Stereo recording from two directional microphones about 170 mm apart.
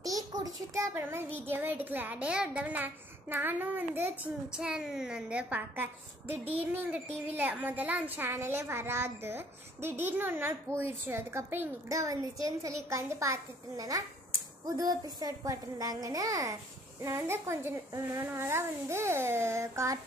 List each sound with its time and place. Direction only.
0.0 s a woman's voice: 20° right (ahead or behind)